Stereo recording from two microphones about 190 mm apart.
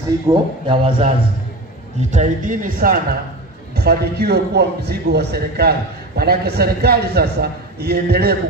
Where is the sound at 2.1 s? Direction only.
40° right (ahead or behind).